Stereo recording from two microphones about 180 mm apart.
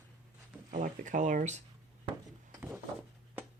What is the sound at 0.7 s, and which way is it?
Speech, 45° right (ahead or behind).